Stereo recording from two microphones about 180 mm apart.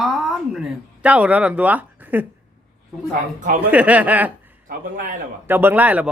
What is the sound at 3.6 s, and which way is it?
Speech, 10° right (ahead or behind).